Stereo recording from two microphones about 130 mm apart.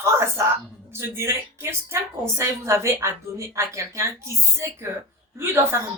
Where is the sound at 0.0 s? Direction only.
20° right (ahead or behind).